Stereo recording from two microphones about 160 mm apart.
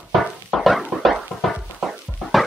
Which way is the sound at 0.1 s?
Centre (ahead or behind).